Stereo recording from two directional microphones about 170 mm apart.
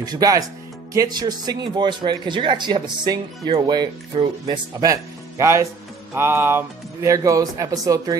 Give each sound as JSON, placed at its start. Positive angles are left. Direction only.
{"t": 0.0, "sound": "speech", "side_deg": -20}